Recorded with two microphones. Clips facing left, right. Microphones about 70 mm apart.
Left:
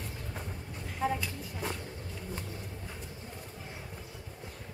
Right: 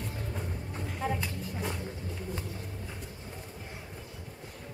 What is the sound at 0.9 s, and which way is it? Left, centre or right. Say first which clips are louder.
Speech: left 2 dB; centre.